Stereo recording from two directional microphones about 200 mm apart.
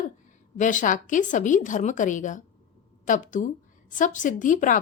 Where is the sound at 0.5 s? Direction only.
40° left (ahead or behind).